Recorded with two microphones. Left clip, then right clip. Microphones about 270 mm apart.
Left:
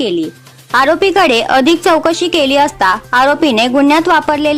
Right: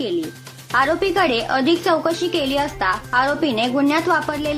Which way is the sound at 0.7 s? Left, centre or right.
Left.